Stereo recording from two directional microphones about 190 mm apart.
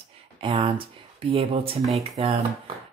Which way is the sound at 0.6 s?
25° right (ahead or behind).